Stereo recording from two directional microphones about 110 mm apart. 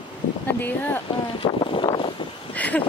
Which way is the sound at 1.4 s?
50° left (ahead or behind).